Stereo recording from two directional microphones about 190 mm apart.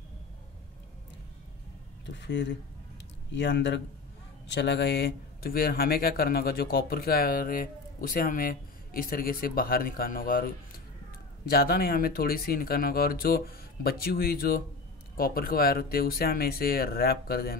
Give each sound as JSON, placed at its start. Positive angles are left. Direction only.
{"t": 2.0, "sound": "speech", "side_deg": 70}